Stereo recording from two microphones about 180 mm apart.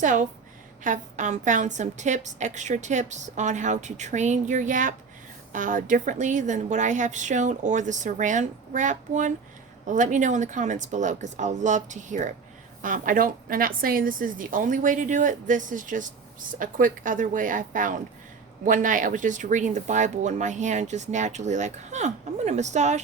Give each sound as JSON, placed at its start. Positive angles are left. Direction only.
{"t": 0.0, "sound": "a woman's voice", "side_deg": -45}